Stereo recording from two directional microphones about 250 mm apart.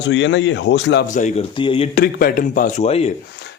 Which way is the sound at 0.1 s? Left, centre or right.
Left.